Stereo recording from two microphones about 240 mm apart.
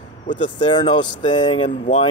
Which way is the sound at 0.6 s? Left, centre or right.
Centre.